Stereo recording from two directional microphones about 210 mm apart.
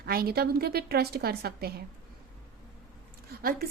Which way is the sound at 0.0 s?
45° right (ahead or behind).